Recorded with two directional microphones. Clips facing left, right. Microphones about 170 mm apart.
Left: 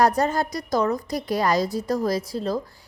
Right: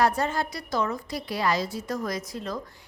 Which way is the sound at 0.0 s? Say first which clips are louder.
Left 4 dB; 40° left (ahead or behind).